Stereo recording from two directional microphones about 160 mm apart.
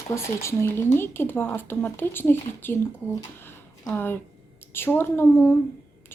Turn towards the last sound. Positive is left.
turn(degrees=15)  # may be behind; listen again after turning